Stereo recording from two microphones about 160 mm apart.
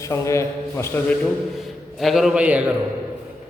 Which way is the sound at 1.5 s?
Centre (ahead or behind).